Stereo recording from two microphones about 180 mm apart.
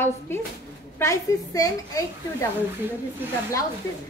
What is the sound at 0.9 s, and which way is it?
A woman's voice, 15° left (ahead or behind).